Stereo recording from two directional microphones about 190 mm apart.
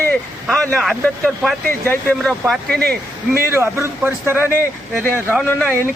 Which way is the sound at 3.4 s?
15° right (ahead or behind).